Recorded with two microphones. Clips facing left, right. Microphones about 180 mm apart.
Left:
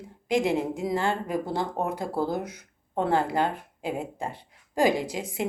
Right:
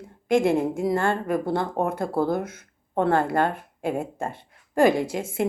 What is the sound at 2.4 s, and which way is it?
Speech, 15° left (ahead or behind).